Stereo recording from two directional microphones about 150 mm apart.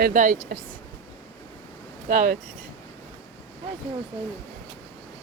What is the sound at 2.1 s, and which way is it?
Speech, 60° right (ahead or behind).